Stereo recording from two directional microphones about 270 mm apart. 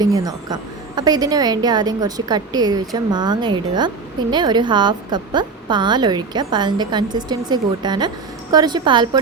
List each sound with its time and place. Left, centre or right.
0.0 s a woman's voice: centre